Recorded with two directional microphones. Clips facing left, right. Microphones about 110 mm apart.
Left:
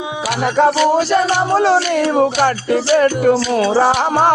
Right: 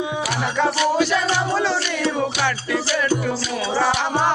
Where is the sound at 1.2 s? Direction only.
55° left (ahead or behind).